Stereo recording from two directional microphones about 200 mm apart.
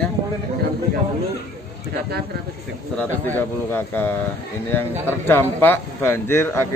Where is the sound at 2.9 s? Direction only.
10° left (ahead or behind).